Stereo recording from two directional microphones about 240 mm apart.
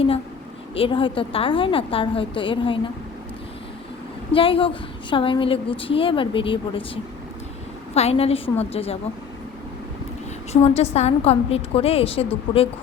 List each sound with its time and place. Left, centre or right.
0.8 s a woman's voice: left
4.3 s a woman's voice: left
10.5 s a woman's voice: left